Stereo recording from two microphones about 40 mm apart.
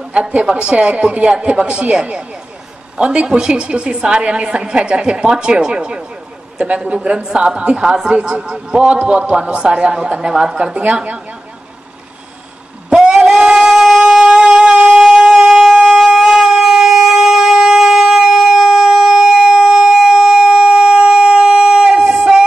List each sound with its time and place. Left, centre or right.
0.1 s a woman's voice: right
3.0 s a woman's voice: right
13.0 s a sound: right